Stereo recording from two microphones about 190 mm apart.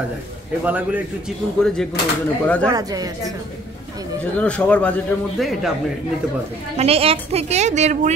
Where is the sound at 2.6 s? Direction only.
20° right (ahead or behind).